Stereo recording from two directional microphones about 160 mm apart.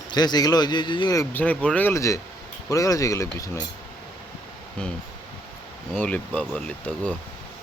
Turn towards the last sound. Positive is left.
turn(degrees=10)  # may be behind; listen again after turning